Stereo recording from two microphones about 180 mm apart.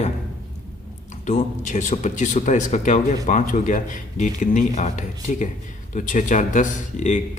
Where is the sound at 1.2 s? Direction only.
45° left (ahead or behind).